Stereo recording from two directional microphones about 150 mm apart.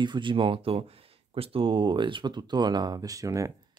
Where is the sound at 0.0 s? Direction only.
30° right (ahead or behind).